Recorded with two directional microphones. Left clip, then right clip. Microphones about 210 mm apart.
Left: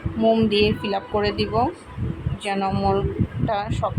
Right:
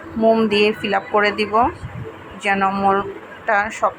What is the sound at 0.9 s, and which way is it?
Speech, 10° right (ahead or behind).